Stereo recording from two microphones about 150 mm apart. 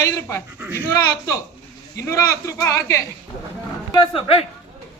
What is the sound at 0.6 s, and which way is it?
Speech, 10° right (ahead or behind).